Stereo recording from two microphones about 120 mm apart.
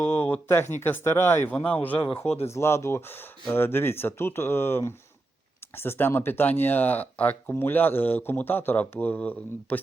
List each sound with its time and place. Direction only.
0.0 s speech: 15° left (ahead or behind)
2.2 s speech: 60° left (ahead or behind)
2.5 s speech: 25° left (ahead or behind)